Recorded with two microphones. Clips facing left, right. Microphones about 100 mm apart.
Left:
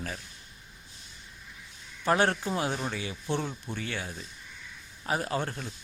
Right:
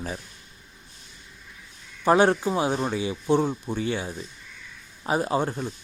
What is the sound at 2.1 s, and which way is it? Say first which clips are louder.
A man's voice: right 6 dB; 20° right (ahead or behind).